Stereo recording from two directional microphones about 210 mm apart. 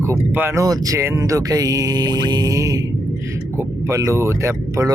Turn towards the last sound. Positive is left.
turn(degrees=-15)  # may be behind; listen again after turning